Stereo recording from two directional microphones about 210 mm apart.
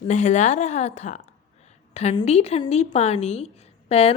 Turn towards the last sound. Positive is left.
turn(degrees=30)  # may be behind; listen again after turning